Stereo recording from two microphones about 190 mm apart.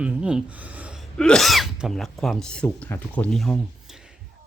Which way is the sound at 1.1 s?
5° left (ahead or behind).